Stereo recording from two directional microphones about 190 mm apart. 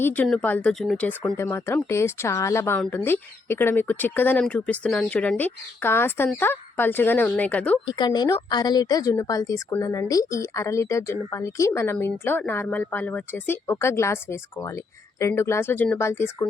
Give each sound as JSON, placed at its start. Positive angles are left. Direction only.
{"t": 0.0, "sound": "speech", "side_deg": 10}
{"t": 7.9, "sound": "speech", "side_deg": 25}